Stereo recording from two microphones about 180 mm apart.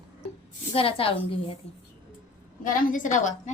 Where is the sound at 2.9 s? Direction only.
45° left (ahead or behind).